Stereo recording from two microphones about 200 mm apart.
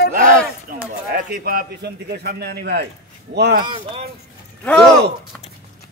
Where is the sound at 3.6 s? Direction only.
25° right (ahead or behind).